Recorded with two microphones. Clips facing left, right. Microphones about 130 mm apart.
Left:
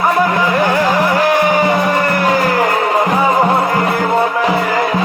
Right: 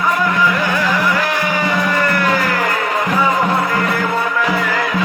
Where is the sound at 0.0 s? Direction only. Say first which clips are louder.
Left 3 dB; 50° left (ahead or behind).